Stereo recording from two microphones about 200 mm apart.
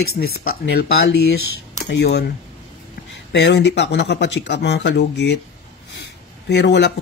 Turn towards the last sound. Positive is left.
turn(degrees=60)  # may be behind; listen again after turning